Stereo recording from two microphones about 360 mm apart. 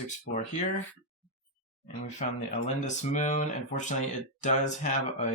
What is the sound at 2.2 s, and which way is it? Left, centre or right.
Speech, left.